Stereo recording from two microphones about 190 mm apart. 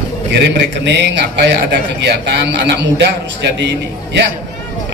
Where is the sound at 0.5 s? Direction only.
65° right (ahead or behind).